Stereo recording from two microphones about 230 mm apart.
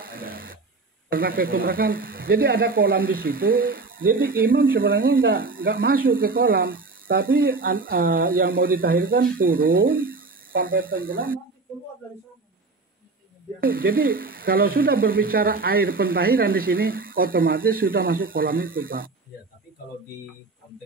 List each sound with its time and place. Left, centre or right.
0.0 s a sound: right
1.1 s speech: right
13.6 s speech: right